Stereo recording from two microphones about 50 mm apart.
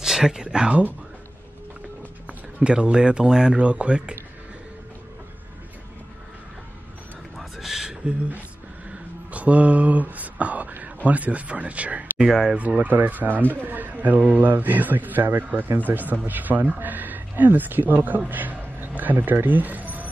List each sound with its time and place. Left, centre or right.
0.0 s speech: centre
2.6 s speech: centre
7.3 s a sound: centre
9.3 s speech: right
12.2 s speech: centre
12.5 s a man's voice: right
18.3 s a sound: right